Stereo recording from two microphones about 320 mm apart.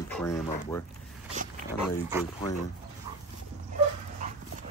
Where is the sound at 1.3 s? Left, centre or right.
Right.